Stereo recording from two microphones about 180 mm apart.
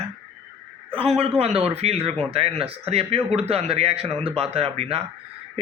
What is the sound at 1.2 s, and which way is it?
A man's voice, 35° right (ahead or behind).